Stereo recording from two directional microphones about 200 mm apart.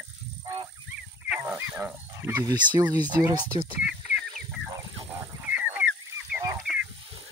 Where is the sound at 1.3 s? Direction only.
5° right (ahead or behind).